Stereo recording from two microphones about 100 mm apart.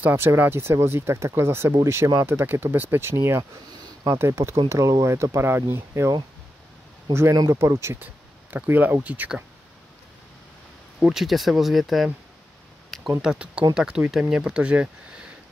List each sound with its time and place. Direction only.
0.0 s speech: 20° right (ahead or behind)
8.0 s speech: 20° right (ahead or behind)
11.0 s speech: 5° right (ahead or behind)
13.2 s speech: 10° right (ahead or behind)